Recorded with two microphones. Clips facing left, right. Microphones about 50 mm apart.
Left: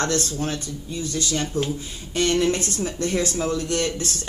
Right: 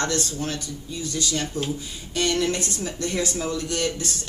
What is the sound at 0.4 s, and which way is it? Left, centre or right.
A man's voice, left.